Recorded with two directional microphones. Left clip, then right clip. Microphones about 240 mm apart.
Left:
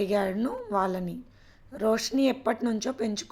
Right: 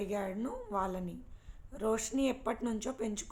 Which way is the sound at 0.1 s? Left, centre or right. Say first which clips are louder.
Left 10 dB; left.